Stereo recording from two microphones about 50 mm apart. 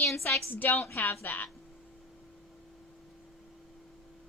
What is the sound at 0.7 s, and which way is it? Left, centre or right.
Speech, left.